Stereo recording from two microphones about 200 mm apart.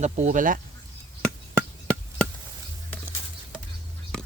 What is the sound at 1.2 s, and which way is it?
Chop, 5° left (ahead or behind).